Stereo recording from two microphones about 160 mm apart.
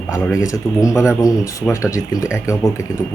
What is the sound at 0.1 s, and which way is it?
A man's voice, 20° left (ahead or behind).